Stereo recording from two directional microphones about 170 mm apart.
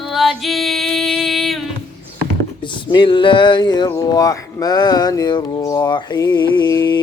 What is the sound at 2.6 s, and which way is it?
Speech, 25° left (ahead or behind).